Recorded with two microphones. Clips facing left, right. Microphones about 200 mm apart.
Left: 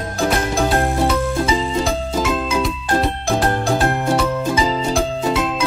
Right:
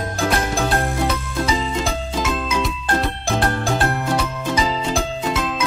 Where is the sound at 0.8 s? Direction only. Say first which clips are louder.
Left 5 dB; 30° left (ahead or behind).